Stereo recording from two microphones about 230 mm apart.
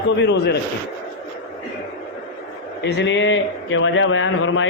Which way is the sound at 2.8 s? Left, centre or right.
Left.